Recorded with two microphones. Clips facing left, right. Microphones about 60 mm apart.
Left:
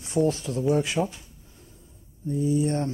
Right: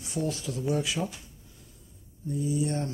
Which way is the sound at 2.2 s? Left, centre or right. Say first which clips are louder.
Left 5 dB; left.